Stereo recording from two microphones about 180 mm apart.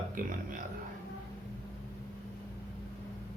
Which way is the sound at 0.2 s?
50° right (ahead or behind).